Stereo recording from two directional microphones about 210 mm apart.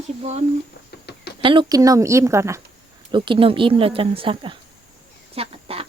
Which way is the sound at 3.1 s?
25° right (ahead or behind).